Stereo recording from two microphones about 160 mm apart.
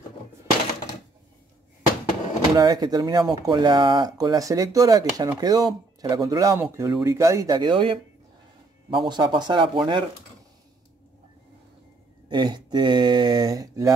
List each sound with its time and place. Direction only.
2.5 s speech: 25° right (ahead or behind)
12.3 s speech: 25° right (ahead or behind)